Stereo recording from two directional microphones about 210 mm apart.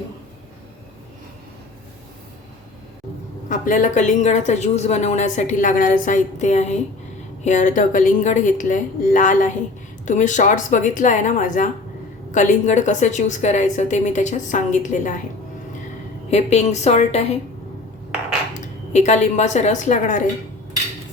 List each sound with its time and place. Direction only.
3.5 s speech: 40° left (ahead or behind)
16.3 s speech: 30° left (ahead or behind)
18.6 s a woman's voice: 35° left (ahead or behind)